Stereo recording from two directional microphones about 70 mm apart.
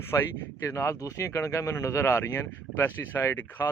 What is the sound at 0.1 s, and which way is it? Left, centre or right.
Speech, left.